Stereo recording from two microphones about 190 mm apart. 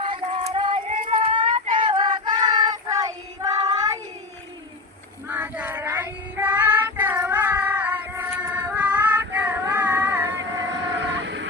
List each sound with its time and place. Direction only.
0.1 s a sound: 30° right (ahead or behind)
2.5 s child singing: 20° right (ahead or behind)
5.3 s child singing: 10° right (ahead or behind)
10.3 s vehicle: 75° right (ahead or behind)